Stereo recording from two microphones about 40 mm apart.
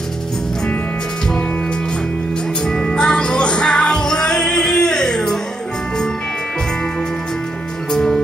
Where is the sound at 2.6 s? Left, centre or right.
Left.